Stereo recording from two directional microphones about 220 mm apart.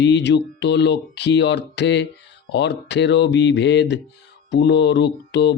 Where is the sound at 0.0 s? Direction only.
50° left (ahead or behind).